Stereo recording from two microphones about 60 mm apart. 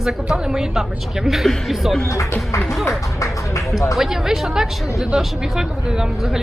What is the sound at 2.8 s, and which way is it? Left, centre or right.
Speech, left.